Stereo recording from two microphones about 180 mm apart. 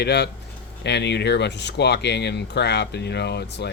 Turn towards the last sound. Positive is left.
turn(degrees=65)  # may be behind; listen again after turning